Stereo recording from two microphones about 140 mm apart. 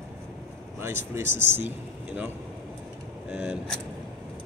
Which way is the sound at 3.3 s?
10° right (ahead or behind).